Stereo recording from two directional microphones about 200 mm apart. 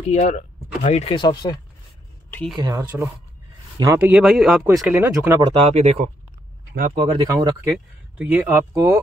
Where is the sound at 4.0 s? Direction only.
5° right (ahead or behind).